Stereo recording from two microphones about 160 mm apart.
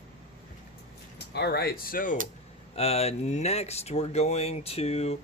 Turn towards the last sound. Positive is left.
turn(degrees=40)  # may be behind; listen again after turning